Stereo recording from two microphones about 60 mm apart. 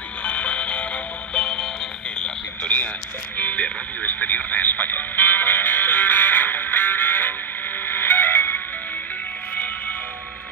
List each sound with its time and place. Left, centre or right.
0.2 s music: left
2.1 s a sound: centre
3.3 s music: left